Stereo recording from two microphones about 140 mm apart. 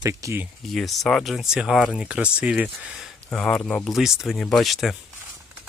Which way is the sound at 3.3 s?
5° left (ahead or behind).